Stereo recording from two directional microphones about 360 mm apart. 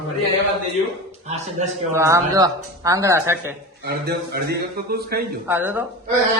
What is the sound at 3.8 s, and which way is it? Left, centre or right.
A man's voice, right.